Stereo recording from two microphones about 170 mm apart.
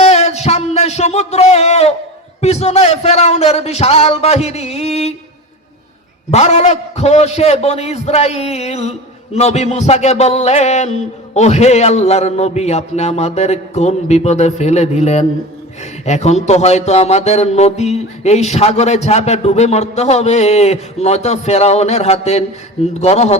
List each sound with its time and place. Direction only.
0.0 s a sound: 40° left (ahead or behind)
2.4 s speech: 40° left (ahead or behind)
6.3 s speech: 40° left (ahead or behind)